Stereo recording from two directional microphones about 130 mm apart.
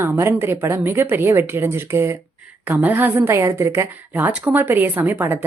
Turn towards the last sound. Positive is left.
turn(degrees=-15)  # may be behind; listen again after turning